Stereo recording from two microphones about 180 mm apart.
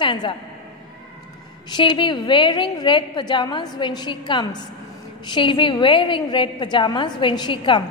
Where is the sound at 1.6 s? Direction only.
25° left (ahead or behind).